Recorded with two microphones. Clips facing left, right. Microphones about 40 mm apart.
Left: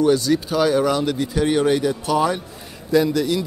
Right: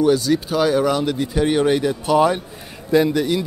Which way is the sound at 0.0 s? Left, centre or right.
Centre.